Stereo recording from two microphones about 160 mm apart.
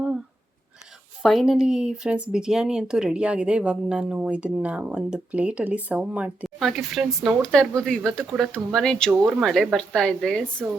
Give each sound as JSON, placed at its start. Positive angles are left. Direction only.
{"t": 1.2, "sound": "speech", "side_deg": 0}